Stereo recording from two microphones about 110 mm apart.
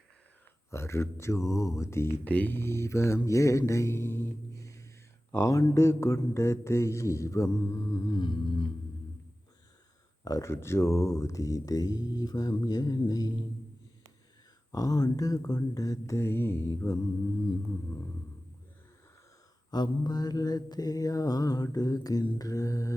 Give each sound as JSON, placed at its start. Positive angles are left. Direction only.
{"t": 0.7, "sound": "speech", "side_deg": 25}
{"t": 10.2, "sound": "speech", "side_deg": 30}
{"t": 14.7, "sound": "speech", "side_deg": 30}
{"t": 19.7, "sound": "speech", "side_deg": 40}